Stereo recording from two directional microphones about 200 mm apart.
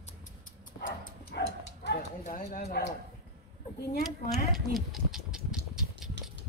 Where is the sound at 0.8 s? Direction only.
50° left (ahead or behind).